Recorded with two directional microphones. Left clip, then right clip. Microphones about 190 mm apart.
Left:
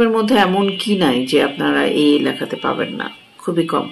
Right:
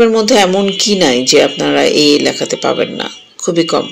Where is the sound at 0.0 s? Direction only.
15° right (ahead or behind).